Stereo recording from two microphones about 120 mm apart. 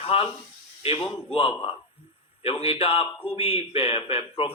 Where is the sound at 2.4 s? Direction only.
55° left (ahead or behind).